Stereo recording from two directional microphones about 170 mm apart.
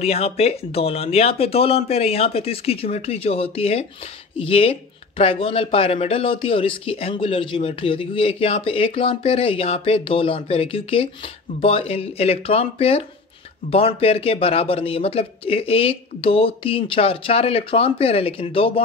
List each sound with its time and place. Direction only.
0.0 s speech: 35° left (ahead or behind)